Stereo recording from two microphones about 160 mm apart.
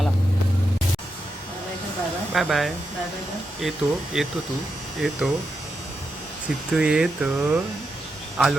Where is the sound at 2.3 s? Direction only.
Centre (ahead or behind).